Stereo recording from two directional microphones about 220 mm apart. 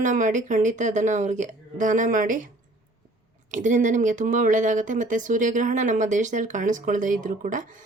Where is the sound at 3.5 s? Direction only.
35° right (ahead or behind).